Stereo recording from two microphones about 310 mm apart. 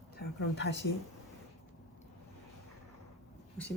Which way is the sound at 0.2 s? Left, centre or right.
Left.